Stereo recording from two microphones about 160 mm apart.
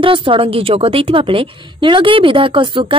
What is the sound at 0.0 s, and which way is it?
A woman's voice, 30° right (ahead or behind).